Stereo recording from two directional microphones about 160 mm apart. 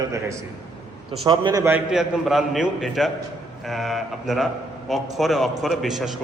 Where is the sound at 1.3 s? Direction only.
30° right (ahead or behind).